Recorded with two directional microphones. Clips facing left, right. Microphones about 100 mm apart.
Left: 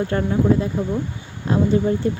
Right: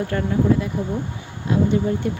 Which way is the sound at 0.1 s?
30° left (ahead or behind).